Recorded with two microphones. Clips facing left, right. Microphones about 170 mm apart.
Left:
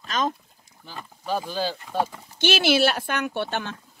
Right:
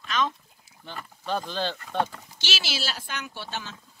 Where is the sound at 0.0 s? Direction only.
40° left (ahead or behind).